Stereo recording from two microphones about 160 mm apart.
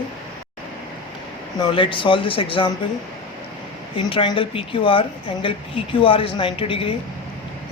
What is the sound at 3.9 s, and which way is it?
A woman's voice, 30° left (ahead or behind).